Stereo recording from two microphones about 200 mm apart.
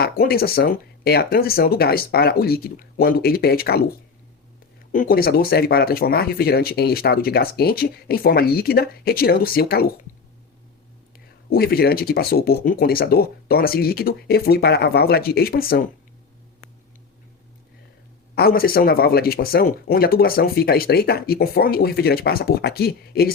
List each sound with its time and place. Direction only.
0.0 s speech: 50° left (ahead or behind)
4.9 s speech: 45° left (ahead or behind)
11.4 s speech: 50° left (ahead or behind)
18.3 s speech: 50° left (ahead or behind)